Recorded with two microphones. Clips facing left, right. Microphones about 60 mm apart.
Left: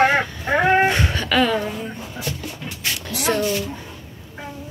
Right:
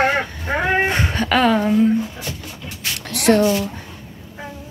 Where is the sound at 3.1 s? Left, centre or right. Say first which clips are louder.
Right 7 dB; right.